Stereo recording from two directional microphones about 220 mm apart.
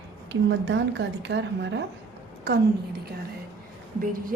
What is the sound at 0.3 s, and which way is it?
Speech, 55° right (ahead or behind).